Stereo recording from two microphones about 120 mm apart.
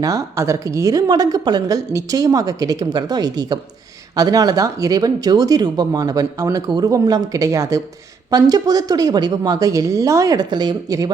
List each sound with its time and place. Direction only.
0.0 s speech: 25° right (ahead or behind)